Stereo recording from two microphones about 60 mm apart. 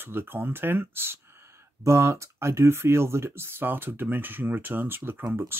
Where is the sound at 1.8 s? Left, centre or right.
Right.